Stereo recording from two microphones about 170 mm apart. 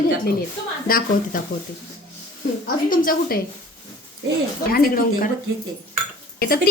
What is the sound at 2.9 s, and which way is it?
Speech, 55° left (ahead or behind).